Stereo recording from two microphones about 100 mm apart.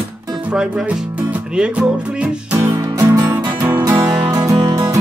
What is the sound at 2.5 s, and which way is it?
Music, 30° right (ahead or behind).